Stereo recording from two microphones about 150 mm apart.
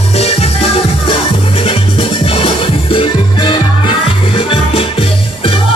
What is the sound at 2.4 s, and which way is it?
Music, 35° left (ahead or behind).